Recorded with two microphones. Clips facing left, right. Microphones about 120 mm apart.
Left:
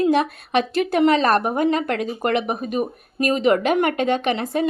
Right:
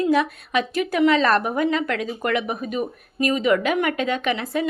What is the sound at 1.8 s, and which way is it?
Speech, 45° left (ahead or behind).